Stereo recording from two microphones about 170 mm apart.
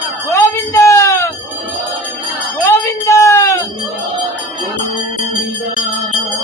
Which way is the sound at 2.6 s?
15° left (ahead or behind).